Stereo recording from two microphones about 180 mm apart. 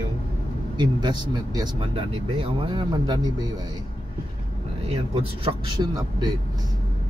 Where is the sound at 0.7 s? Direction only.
25° right (ahead or behind).